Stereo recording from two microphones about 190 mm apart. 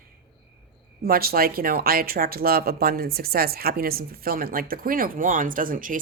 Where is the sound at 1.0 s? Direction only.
50° right (ahead or behind).